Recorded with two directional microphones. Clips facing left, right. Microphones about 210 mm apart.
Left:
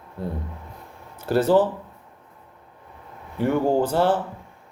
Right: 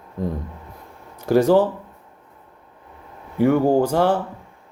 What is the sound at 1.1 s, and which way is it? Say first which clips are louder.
Speech: right 3 dB; 15° right (ahead or behind).